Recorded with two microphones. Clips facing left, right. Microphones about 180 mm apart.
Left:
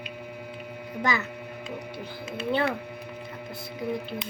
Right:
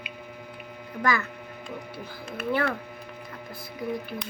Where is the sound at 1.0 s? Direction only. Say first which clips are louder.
Right 2 dB; 20° left (ahead or behind).